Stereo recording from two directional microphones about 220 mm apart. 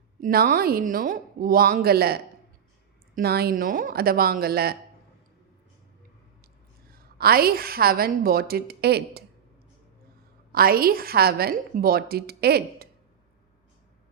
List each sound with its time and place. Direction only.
0.2 s a woman's voice: 40° right (ahead or behind)
6.9 s a woman's voice: 45° right (ahead or behind)
10.5 s a woman's voice: 40° right (ahead or behind)